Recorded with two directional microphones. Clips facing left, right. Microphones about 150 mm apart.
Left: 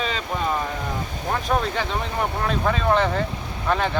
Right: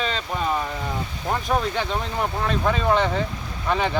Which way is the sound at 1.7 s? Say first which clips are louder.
Even; centre (ahead or behind).